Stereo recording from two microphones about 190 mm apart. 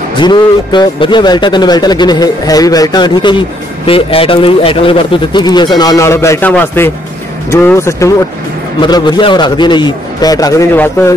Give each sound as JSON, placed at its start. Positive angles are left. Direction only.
{"t": 0.1, "sound": "speech", "side_deg": 25}